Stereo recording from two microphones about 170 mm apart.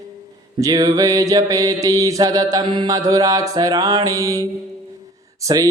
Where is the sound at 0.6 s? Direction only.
20° right (ahead or behind).